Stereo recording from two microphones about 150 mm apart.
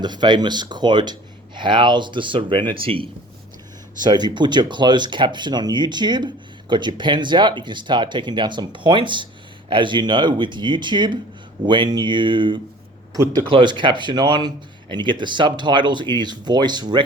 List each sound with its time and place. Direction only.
0.0 s speech: 30° right (ahead or behind)
13.1 s speech: 20° right (ahead or behind)
13.5 s speech: 35° right (ahead or behind)